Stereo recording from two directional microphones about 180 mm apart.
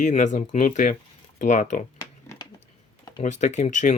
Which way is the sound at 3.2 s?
40° left (ahead or behind).